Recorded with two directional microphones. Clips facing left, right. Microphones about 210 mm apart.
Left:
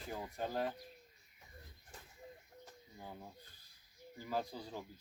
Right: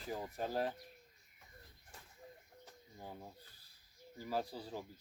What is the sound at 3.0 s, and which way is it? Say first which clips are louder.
Speech: right 1 dB; 5° right (ahead or behind).